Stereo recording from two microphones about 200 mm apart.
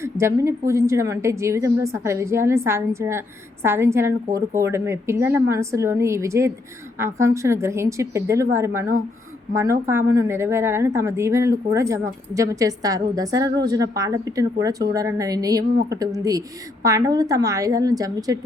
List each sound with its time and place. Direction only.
0.0 s a woman's voice: 15° right (ahead or behind)